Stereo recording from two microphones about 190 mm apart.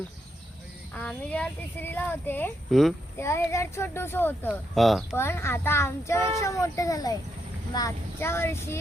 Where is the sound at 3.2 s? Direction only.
15° left (ahead or behind).